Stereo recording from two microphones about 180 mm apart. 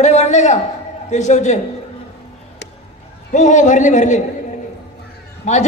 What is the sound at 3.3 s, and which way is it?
Speech, 45° left (ahead or behind).